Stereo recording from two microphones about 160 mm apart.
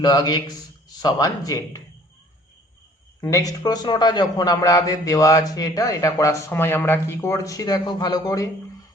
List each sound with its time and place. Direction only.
0.0 s a man's voice: 25° left (ahead or behind)
3.2 s a man's voice: 20° left (ahead or behind)